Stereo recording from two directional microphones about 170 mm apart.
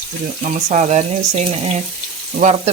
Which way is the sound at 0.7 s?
45° right (ahead or behind).